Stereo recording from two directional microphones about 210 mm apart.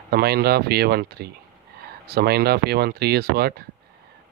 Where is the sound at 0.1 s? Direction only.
50° right (ahead or behind).